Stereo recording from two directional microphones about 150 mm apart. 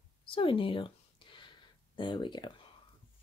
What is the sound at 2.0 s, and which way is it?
Speech, 30° left (ahead or behind).